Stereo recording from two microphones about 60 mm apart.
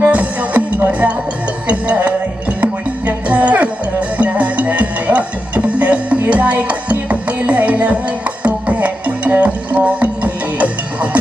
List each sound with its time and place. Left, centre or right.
0.0 s music: right